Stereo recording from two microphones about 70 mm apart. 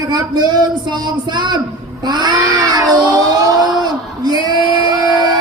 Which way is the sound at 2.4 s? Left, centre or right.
Right.